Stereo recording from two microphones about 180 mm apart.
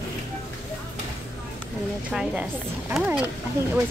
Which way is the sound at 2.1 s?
5° right (ahead or behind).